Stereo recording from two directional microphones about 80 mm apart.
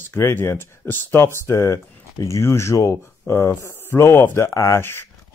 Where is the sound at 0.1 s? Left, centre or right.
Left.